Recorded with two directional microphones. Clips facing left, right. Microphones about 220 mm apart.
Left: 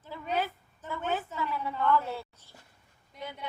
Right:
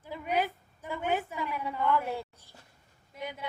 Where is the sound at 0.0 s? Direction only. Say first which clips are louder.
Right 2 dB; 15° right (ahead or behind).